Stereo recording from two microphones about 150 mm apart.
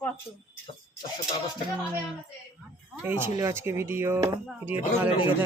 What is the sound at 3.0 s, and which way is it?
Speech, 15° right (ahead or behind).